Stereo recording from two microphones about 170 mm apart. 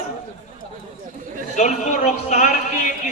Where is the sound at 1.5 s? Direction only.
45° left (ahead or behind).